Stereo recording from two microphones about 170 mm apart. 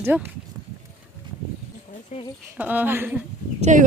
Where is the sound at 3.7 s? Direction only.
45° right (ahead or behind).